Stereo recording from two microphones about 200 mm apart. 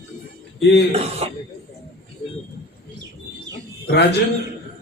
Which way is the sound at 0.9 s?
30° right (ahead or behind).